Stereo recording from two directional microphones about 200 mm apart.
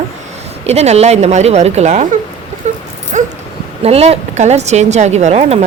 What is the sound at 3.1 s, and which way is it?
Dog, 35° right (ahead or behind).